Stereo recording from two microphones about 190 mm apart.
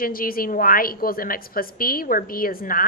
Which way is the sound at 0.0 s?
50° left (ahead or behind).